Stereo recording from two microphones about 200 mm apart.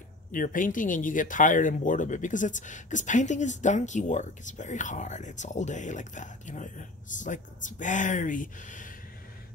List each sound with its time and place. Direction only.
0.3 s speech: 40° left (ahead or behind)